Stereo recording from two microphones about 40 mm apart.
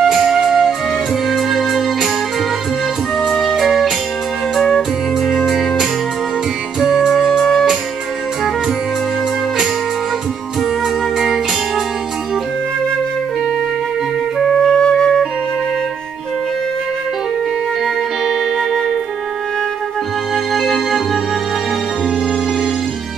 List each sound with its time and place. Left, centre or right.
0.0 s music: centre
3.3 s music: centre
3.5 s music: centre
14.7 s music: centre
20.5 s music: centre